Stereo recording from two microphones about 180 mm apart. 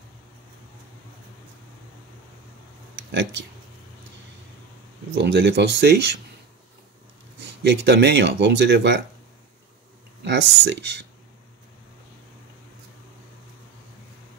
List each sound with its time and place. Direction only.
5.1 s speech: 75° right (ahead or behind)
7.3 s speech: 70° right (ahead or behind)
10.2 s speech: 75° right (ahead or behind)